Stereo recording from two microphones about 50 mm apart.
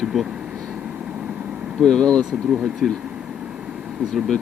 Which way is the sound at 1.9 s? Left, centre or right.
Centre.